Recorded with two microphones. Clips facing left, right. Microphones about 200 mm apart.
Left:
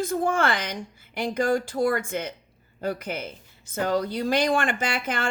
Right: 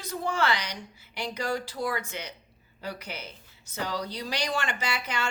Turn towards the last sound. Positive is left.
turn(degrees=50)  # may be behind; listen again after turning